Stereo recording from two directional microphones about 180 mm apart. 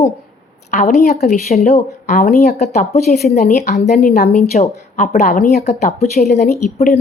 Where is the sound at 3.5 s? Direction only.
40° left (ahead or behind).